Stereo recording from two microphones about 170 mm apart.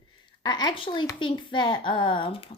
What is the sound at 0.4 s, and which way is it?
A child's voice, 25° left (ahead or behind).